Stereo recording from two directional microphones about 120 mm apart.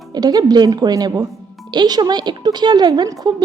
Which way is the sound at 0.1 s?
35° right (ahead or behind).